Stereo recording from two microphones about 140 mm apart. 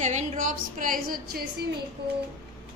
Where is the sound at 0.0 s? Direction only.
55° right (ahead or behind); by 1.4 s 80° right.